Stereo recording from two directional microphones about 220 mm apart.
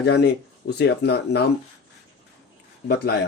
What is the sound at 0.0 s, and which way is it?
A man's voice, 50° left (ahead or behind).